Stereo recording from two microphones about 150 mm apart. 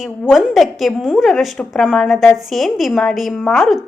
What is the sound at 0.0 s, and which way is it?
A woman's voice, centre (ahead or behind).